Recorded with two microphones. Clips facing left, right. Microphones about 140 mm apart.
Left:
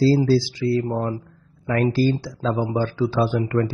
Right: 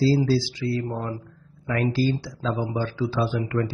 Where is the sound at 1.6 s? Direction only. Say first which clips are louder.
Left 4 dB; 40° left (ahead or behind).